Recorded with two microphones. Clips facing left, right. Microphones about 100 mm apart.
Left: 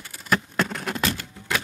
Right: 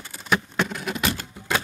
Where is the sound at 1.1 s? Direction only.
25° right (ahead or behind).